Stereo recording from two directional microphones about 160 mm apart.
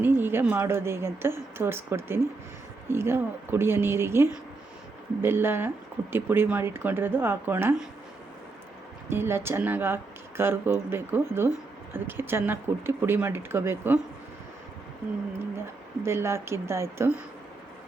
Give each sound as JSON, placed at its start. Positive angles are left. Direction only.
{"t": 0.0, "sound": "speech", "side_deg": -15}
{"t": 9.0, "sound": "speech", "side_deg": -15}
{"t": 16.0, "sound": "speech", "side_deg": -15}